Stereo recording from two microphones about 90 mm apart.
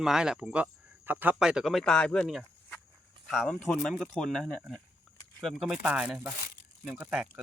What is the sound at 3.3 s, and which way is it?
Speech, 5° left (ahead or behind).